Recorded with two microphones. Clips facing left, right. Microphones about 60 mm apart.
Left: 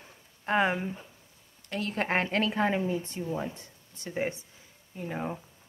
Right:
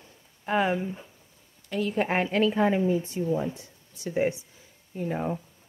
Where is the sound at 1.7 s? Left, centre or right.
Left.